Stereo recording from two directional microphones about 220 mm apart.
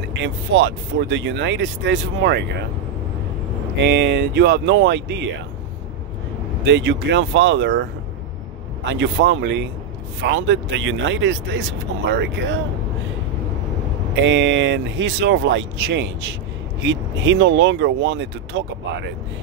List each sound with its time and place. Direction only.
0.2 s speech: 55° right (ahead or behind)
3.8 s speech: 50° right (ahead or behind)
6.6 s speech: 55° right (ahead or behind)
8.8 s speech: 55° right (ahead or behind)
14.2 s speech: 55° right (ahead or behind)